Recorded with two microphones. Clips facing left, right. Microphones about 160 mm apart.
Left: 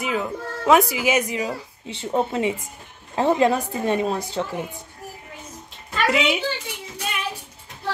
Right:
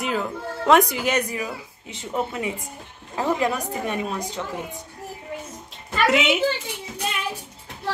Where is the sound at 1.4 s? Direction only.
30° left (ahead or behind).